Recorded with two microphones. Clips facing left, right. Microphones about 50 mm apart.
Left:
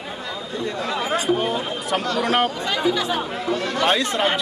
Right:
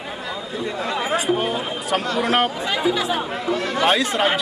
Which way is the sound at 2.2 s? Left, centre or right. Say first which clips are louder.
Right 1 dB; centre.